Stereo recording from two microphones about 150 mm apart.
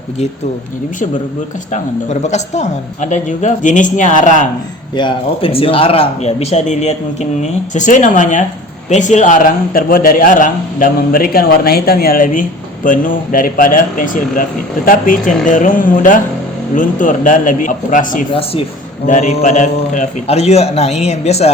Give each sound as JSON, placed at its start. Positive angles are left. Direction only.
{"t": 1.7, "sound": "a man's voice", "side_deg": 50}
{"t": 4.9, "sound": "a man's voice", "side_deg": 35}